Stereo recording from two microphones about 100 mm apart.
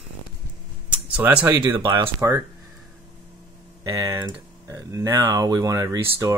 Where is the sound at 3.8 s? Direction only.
35° right (ahead or behind).